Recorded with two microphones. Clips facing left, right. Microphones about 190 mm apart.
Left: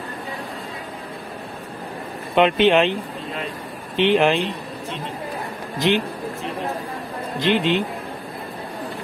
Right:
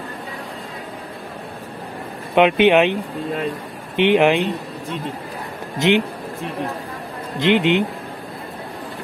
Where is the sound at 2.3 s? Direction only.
15° right (ahead or behind).